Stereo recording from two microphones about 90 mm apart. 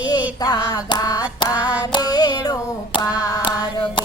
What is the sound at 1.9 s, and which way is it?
Child singing, 45° left (ahead or behind).